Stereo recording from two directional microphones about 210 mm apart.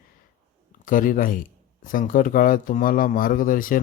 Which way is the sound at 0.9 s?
40° left (ahead or behind).